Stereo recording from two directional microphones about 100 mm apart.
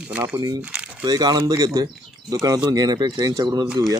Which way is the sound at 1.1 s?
40° right (ahead or behind).